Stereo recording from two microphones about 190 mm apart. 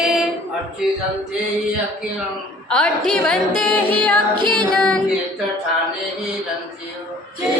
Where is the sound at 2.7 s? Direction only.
5° left (ahead or behind).